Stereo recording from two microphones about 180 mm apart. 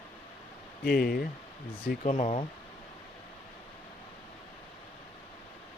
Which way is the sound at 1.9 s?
45° left (ahead or behind).